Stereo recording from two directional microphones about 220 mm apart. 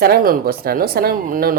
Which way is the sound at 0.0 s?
45° right (ahead or behind).